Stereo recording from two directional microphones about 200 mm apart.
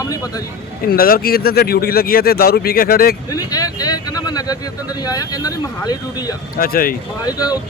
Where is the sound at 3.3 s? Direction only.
20° left (ahead or behind).